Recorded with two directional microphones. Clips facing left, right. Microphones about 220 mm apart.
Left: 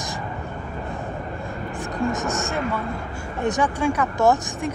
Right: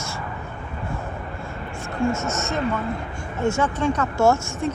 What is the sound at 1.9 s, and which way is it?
Speech, 15° left (ahead or behind).